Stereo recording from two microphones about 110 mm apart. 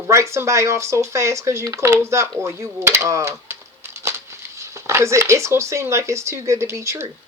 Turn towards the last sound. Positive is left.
turn(degrees=-25)  # may be behind; listen again after turning